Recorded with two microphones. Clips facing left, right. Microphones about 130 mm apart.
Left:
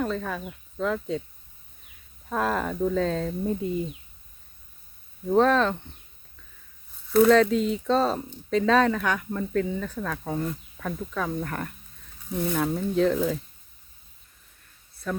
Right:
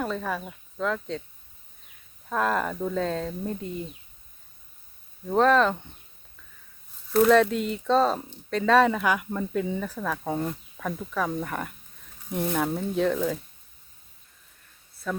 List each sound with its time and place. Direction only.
0.0 s speech: centre (ahead or behind)
2.3 s speech: centre (ahead or behind)
5.3 s speech: centre (ahead or behind)
7.3 s speech: 5° right (ahead or behind)
10.2 s speech: 20° right (ahead or behind)
10.8 s speech: 5° right (ahead or behind)